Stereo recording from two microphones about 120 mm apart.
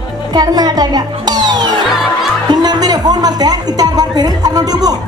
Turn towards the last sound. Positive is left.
turn(degrees=-35)  # may be behind; listen again after turning